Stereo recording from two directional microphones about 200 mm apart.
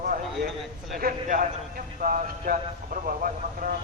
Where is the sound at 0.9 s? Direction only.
45° right (ahead or behind).